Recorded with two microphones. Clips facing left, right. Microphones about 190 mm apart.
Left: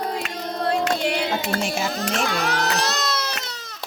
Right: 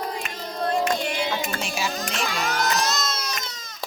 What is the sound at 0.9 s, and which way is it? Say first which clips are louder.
Music: left 3 dB; 70° left (ahead or behind).